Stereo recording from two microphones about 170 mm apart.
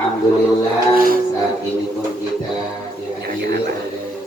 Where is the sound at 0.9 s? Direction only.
55° right (ahead or behind).